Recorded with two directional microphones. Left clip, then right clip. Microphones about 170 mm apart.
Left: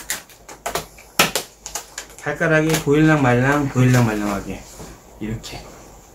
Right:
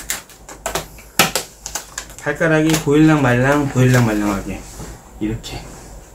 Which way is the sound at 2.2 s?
20° left (ahead or behind).